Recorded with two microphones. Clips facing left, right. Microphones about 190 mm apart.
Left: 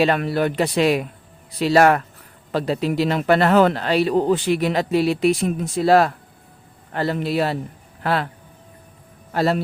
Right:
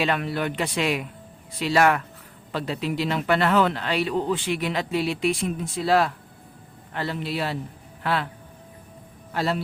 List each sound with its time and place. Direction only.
0.0 s a man's voice: 40° left (ahead or behind)
9.3 s speech: 45° left (ahead or behind)